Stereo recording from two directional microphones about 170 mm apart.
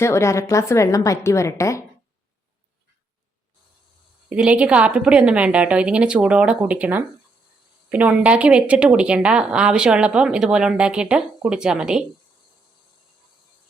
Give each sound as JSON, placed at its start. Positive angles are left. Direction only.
{"t": 0.0, "sound": "a woman's voice", "side_deg": 15}
{"t": 4.3, "sound": "a woman's voice", "side_deg": -5}